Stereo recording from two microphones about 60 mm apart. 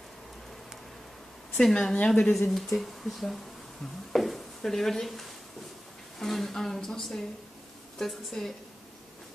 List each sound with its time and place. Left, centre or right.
1.6 s speech: centre
2.0 s a woman's voice: centre
2.5 s a woman's voice: centre